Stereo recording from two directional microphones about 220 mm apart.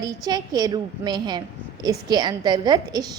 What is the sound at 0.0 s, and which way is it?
A woman's voice, 15° right (ahead or behind).